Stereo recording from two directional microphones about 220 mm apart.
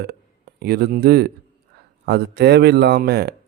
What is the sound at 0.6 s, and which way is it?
Speech, 45° right (ahead or behind).